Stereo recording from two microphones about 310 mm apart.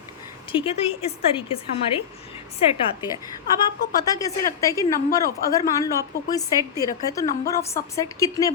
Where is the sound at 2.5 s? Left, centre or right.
Centre.